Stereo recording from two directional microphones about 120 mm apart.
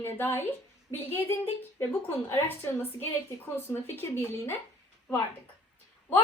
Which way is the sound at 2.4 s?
15° left (ahead or behind).